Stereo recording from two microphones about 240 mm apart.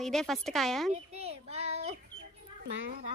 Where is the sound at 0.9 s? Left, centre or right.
Right.